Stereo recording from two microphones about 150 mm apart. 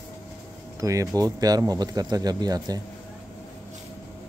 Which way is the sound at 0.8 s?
20° right (ahead or behind).